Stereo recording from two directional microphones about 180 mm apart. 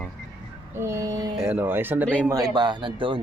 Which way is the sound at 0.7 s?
15° right (ahead or behind).